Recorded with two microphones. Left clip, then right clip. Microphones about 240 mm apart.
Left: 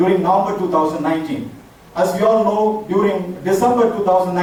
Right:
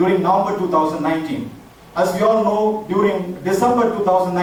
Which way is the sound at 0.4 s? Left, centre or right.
Centre.